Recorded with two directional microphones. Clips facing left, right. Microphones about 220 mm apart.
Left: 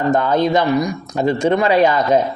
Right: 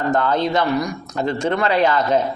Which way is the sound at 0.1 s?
15° left (ahead or behind).